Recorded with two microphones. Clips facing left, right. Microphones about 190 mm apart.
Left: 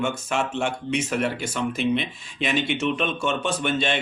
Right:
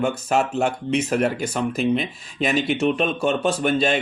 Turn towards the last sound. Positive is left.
turn(degrees=-40)  # may be behind; listen again after turning